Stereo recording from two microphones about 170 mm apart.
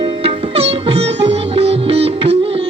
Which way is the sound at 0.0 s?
35° right (ahead or behind).